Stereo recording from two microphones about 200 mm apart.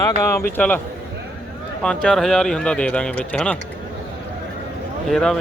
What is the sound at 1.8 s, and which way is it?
Speech, 5° left (ahead or behind).